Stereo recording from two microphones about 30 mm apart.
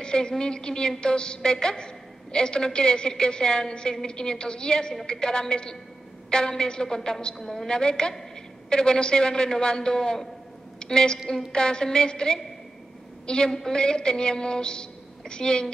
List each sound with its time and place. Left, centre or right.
0.0 s a man's voice: left
7.3 s a woman's voice: centre
7.6 s a man's voice: left
13.5 s a man's voice: left